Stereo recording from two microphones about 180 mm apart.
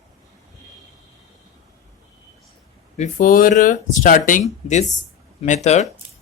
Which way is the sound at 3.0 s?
45° left (ahead or behind).